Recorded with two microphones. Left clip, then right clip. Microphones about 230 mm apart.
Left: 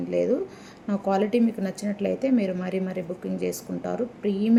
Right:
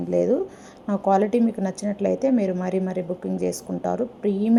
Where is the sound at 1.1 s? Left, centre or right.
Centre.